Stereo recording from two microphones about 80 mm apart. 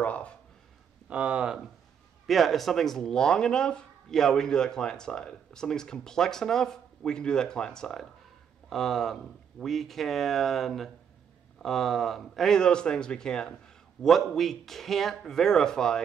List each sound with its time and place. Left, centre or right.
0.0 s speech: centre
1.0 s speech: centre
2.2 s speech: centre